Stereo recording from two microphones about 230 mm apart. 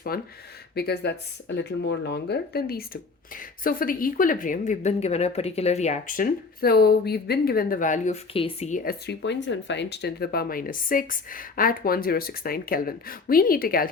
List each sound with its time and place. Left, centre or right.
0.1 s speech: left